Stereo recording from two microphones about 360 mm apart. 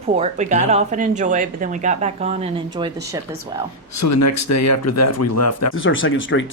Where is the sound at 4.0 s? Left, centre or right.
Left.